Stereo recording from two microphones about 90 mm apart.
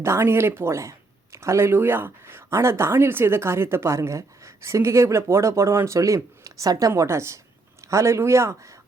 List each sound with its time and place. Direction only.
0.0 s speech: 30° right (ahead or behind)